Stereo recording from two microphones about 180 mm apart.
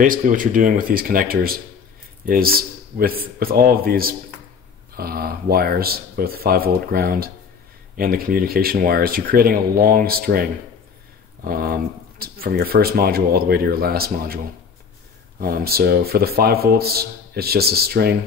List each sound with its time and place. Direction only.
0.0 s speech: 50° right (ahead or behind)